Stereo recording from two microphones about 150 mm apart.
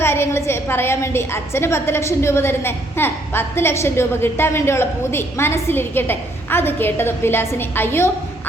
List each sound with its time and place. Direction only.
0.0 s a woman's voice: 15° left (ahead or behind)